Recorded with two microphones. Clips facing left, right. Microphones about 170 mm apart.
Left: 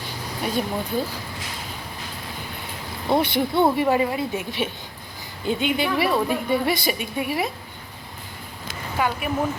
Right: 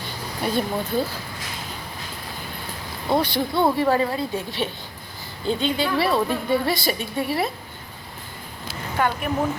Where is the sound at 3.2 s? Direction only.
20° left (ahead or behind).